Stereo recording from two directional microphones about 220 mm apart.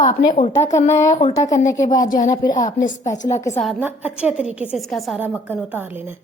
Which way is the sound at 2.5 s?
35° left (ahead or behind).